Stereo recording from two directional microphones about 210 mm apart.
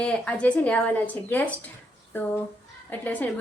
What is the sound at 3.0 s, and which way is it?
Speech, 10° left (ahead or behind).